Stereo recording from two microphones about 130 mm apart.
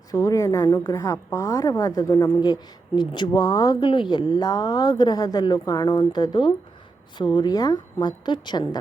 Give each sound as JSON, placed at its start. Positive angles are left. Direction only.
{"t": 0.1, "sound": "speech", "side_deg": 25}